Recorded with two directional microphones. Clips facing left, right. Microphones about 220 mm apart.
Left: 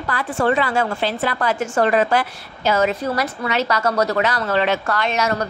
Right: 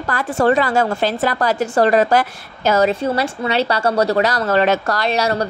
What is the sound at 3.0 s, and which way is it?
A woman's voice, 30° right (ahead or behind).